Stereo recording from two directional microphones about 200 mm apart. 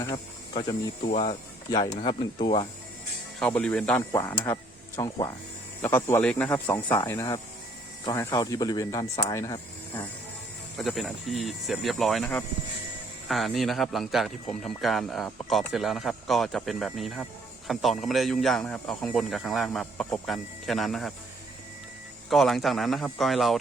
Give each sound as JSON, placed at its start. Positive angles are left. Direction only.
{"t": 0.0, "sound": "speech", "side_deg": 20}
{"t": 3.4, "sound": "speech", "side_deg": 5}
{"t": 10.8, "sound": "speech", "side_deg": 0}
{"t": 22.3, "sound": "speech", "side_deg": 0}